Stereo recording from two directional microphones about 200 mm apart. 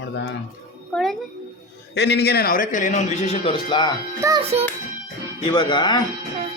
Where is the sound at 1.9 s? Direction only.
55° left (ahead or behind); by 3.9 s 25° left (ahead or behind).